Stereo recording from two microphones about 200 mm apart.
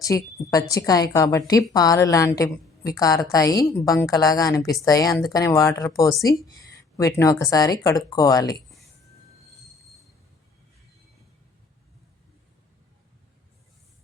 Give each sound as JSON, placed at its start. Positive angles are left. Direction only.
{"t": 0.0, "sound": "speech", "side_deg": 15}